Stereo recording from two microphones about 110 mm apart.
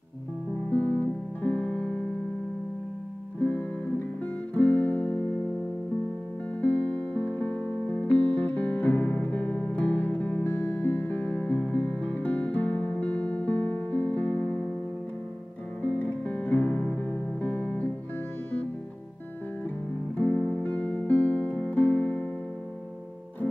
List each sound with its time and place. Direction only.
0.7 s music: 10° left (ahead or behind)
3.3 s music: 15° left (ahead or behind)
6.6 s music: 15° left (ahead or behind)
15.8 s music: 10° left (ahead or behind)
20.2 s music: 15° left (ahead or behind)